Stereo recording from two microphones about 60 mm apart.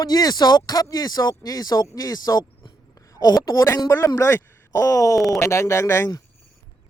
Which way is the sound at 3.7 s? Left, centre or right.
Left.